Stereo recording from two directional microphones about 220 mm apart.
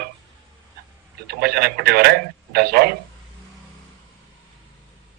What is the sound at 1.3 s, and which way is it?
A man's voice, 45° right (ahead or behind).